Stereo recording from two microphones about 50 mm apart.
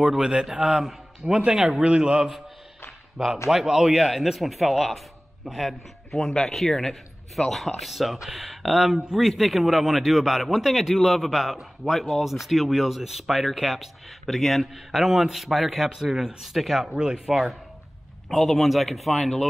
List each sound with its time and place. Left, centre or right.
0.0 s a man's voice: centre
3.4 s speech: centre